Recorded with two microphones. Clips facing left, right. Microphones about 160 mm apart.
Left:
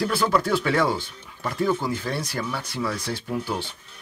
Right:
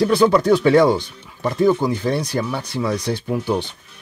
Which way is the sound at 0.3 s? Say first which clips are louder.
Right 8 dB; 20° right (ahead or behind).